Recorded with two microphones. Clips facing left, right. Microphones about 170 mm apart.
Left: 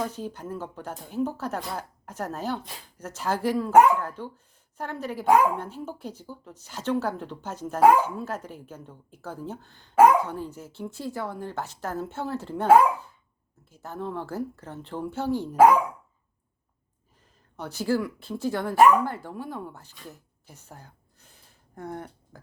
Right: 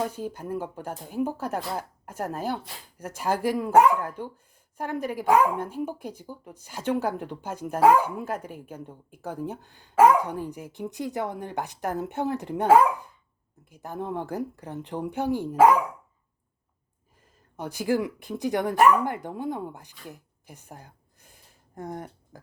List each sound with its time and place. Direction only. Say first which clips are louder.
0.0 s speech: right 1 dB; 10° right (ahead or behind)
17.6 s speech: right 1 dB; 10° right (ahead or behind)